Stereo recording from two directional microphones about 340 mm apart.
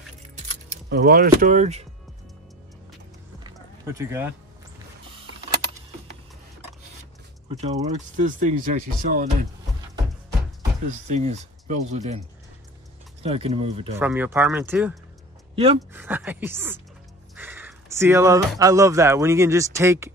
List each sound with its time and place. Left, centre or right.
0.5 s speech: right
3.4 s run: centre
7.5 s mechanisms: centre
11.1 s speech: centre
11.9 s mechanisms: centre
13.2 s speech: centre
13.9 s speech: centre
15.5 s speech: centre
16.0 s speech: centre